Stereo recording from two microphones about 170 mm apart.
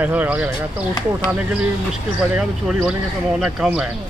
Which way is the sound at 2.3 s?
5° right (ahead or behind).